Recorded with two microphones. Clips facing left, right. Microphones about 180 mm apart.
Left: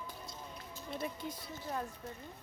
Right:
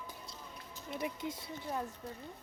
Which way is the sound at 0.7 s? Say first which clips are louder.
Right 1 dB; 20° right (ahead or behind).